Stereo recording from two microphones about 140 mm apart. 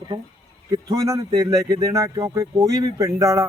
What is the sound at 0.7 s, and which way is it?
Speech, 25° right (ahead or behind).